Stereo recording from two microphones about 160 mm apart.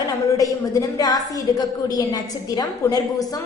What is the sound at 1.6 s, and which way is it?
A woman's voice, 25° left (ahead or behind).